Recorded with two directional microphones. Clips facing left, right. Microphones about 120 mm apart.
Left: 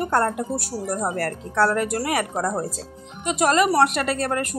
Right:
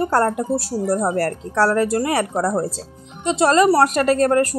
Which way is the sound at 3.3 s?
30° right (ahead or behind).